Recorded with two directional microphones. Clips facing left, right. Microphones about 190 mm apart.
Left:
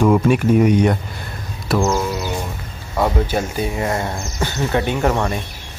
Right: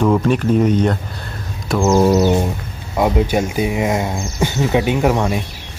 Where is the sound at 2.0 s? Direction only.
45° right (ahead or behind).